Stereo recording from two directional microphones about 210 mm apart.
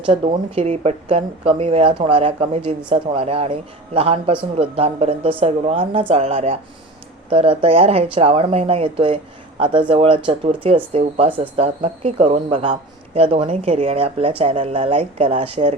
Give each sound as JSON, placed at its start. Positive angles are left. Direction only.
{"t": 0.0, "sound": "speech", "side_deg": -25}